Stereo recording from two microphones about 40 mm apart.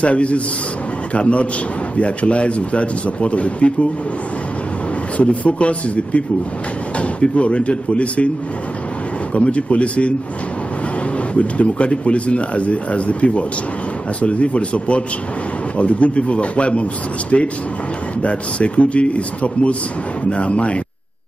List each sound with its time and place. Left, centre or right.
0.0 s speech: left
5.1 s speech: left
9.3 s speech: left
11.3 s speech: left